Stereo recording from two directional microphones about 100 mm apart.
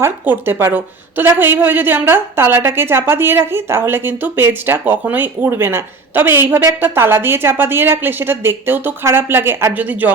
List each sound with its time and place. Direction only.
0.0 s a woman's voice: 25° right (ahead or behind)